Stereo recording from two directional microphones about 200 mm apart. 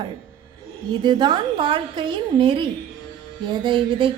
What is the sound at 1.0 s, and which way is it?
A woman's voice, 20° right (ahead or behind).